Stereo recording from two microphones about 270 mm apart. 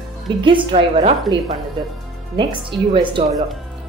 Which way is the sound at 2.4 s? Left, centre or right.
Centre.